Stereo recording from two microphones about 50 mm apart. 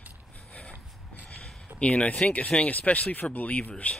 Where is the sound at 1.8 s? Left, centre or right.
Left.